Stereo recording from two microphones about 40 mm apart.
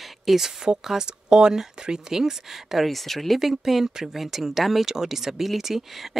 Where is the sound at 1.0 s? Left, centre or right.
Right.